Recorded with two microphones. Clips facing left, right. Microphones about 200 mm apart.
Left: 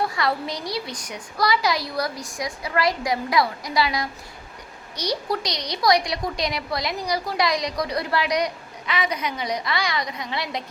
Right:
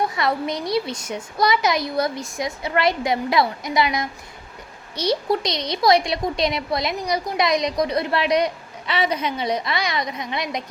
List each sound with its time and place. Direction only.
0.0 s a woman's voice: 20° right (ahead or behind)